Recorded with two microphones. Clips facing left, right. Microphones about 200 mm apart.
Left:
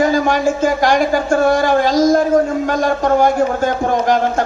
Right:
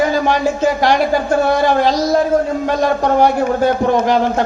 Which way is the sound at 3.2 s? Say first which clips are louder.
Right 1 dB; 45° left (ahead or behind).